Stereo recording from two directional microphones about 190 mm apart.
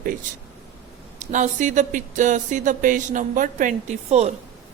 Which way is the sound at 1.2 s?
40° right (ahead or behind).